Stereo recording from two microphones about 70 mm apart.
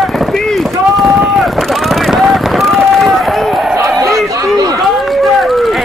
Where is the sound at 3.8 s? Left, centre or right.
Right.